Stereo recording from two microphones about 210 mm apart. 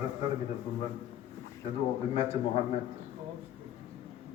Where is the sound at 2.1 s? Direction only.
30° left (ahead or behind).